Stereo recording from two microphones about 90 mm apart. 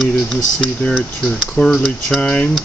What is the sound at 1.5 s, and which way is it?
Speech, 10° left (ahead or behind).